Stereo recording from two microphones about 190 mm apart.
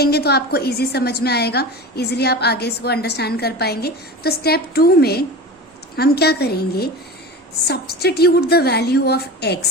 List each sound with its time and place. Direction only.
0.0 s a woman's voice: 55° left (ahead or behind)